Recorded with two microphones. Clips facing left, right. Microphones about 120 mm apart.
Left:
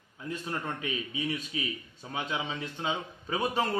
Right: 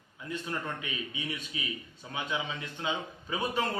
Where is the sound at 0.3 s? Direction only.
35° left (ahead or behind).